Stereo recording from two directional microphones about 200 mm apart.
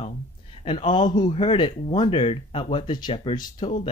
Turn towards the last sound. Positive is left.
turn(degrees=30)  # may be behind; listen again after turning